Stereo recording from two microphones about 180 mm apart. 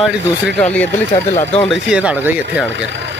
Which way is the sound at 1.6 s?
5° right (ahead or behind).